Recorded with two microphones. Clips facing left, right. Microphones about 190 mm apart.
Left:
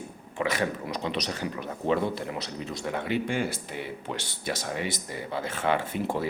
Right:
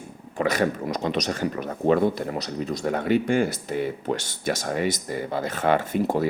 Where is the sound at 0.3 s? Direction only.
40° right (ahead or behind).